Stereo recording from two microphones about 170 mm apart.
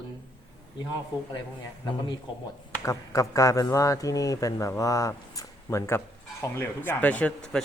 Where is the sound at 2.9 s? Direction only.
20° left (ahead or behind).